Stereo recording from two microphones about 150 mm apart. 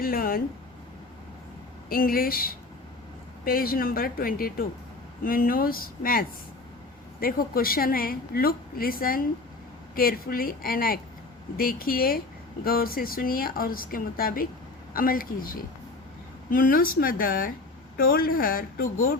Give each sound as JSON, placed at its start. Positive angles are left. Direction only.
{"t": 0.0, "sound": "a woman's voice", "side_deg": 75}
{"t": 1.9, "sound": "a woman's voice", "side_deg": 75}